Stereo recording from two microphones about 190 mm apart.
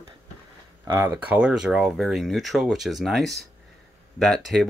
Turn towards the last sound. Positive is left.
turn(degrees=0)  # may be behind; listen again after turning